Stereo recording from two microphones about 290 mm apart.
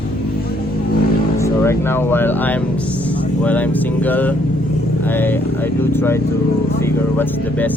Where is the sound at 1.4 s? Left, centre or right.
Centre.